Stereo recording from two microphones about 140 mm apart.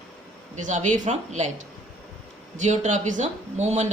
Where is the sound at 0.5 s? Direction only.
60° right (ahead or behind).